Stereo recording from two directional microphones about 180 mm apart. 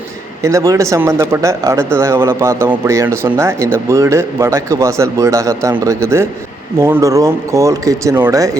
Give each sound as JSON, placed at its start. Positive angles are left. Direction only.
{"t": 0.4, "sound": "speech", "side_deg": -15}